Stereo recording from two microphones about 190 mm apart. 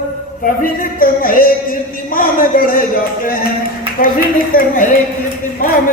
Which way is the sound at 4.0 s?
50° left (ahead or behind).